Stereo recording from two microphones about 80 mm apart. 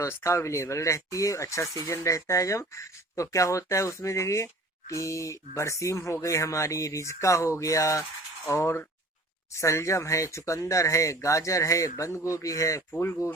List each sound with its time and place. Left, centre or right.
0.1 s speech: left